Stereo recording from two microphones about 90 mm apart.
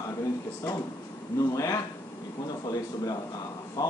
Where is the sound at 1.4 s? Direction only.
40° left (ahead or behind).